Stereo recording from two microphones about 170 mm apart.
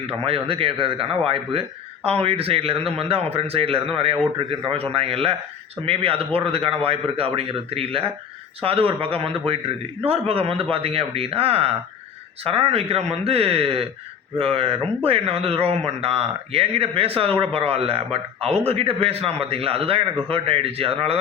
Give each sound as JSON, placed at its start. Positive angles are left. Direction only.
{"t": 0.1, "sound": "speech", "side_deg": -35}